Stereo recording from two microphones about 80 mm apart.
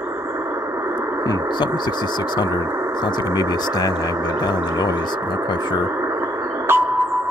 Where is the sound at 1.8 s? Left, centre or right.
Left.